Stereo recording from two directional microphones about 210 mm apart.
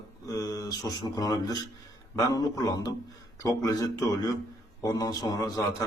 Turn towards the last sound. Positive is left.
turn(degrees=15)  # may be behind; listen again after turning